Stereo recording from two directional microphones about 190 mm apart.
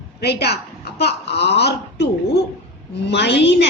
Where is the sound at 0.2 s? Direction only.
60° left (ahead or behind).